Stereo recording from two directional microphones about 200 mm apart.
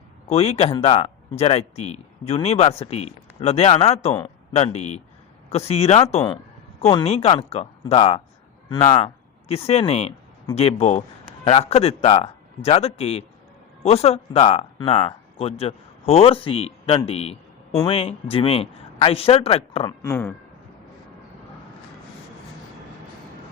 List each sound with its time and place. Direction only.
0.3 s a man's voice: 30° left (ahead or behind)
20.0 s speech: 10° left (ahead or behind)